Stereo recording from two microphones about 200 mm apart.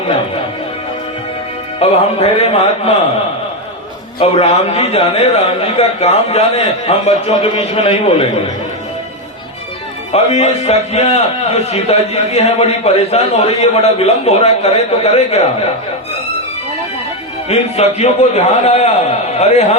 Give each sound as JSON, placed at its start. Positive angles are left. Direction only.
{"t": 1.8, "sound": "a man's voice", "side_deg": 30}
{"t": 4.2, "sound": "a man's voice", "side_deg": 30}
{"t": 10.1, "sound": "a man's voice", "side_deg": 30}
{"t": 17.5, "sound": "a man's voice", "side_deg": 35}